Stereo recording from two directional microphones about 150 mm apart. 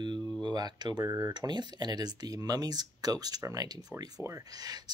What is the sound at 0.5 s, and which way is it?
Speech, 30° right (ahead or behind).